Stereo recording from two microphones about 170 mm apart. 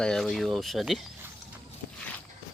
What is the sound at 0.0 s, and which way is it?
Speech, 5° left (ahead or behind).